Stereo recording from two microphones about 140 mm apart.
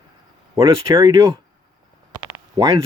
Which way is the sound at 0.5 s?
20° right (ahead or behind).